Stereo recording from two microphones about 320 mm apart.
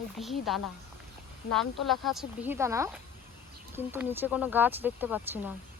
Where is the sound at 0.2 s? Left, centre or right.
Centre.